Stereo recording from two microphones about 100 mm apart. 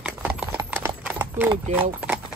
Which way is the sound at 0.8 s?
20° right (ahead or behind).